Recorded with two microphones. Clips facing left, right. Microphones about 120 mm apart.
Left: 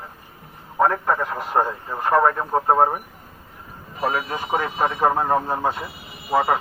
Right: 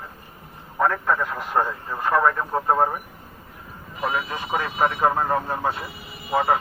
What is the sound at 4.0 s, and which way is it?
Speech, 45° left (ahead or behind).